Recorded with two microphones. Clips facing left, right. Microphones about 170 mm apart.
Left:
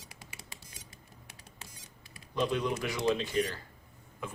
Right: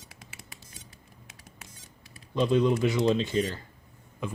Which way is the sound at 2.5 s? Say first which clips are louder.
Right 9 dB; 25° right (ahead or behind).